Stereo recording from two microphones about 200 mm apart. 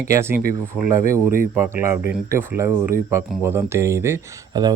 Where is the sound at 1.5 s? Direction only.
10° right (ahead or behind).